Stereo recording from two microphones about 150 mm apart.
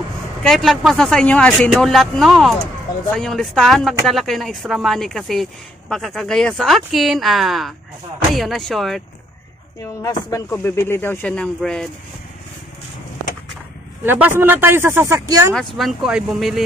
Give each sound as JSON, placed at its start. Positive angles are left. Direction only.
{"t": 0.4, "sound": "speech", "side_deg": 0}
{"t": 10.5, "sound": "speech", "side_deg": 15}
{"t": 14.0, "sound": "speech", "side_deg": -10}
{"t": 15.5, "sound": "speech", "side_deg": 0}